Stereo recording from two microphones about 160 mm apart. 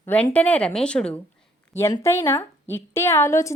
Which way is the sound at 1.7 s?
15° left (ahead or behind).